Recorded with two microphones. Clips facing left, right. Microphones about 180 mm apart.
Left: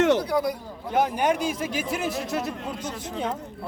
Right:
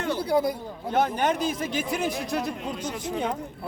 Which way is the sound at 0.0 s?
85° left.